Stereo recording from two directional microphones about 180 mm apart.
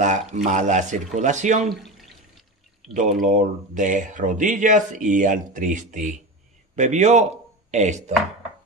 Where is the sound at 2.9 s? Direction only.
40° right (ahead or behind).